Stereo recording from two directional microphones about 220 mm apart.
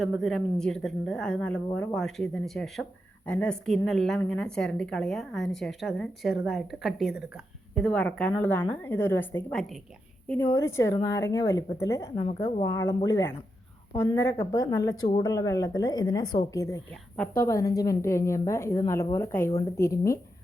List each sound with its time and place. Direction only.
0.0 s a woman's voice: centre (ahead or behind)
10.2 s a woman's voice: 10° left (ahead or behind)
12.1 s a woman's voice: 25° left (ahead or behind)
12.7 s a woman's voice: 15° left (ahead or behind)